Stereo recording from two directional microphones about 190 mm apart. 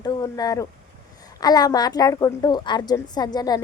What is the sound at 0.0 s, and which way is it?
A woman's voice, 20° left (ahead or behind).